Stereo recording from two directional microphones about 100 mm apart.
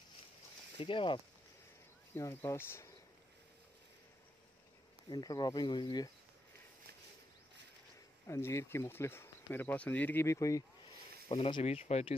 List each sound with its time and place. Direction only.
0.7 s speech: 60° left (ahead or behind)
2.1 s speech: 25° left (ahead or behind)
5.1 s speech: 45° left (ahead or behind)
8.3 s speech: 25° left (ahead or behind)
10.2 s speech: 30° left (ahead or behind)
11.2 s speech: 80° left
11.6 s speech: 90° left